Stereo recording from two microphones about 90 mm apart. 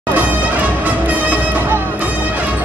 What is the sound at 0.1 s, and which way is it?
Music, 15° right (ahead or behind).